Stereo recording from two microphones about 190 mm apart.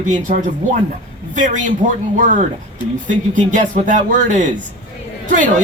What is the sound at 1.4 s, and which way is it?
A man's voice, 40° right (ahead or behind).